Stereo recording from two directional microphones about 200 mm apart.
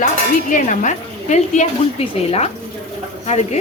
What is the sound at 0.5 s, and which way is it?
Speech, 40° left (ahead or behind).